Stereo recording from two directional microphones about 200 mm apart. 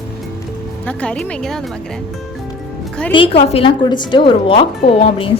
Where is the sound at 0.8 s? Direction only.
5° left (ahead or behind).